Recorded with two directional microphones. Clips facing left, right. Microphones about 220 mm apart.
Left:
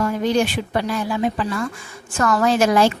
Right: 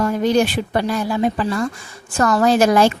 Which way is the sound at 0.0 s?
40° right (ahead or behind).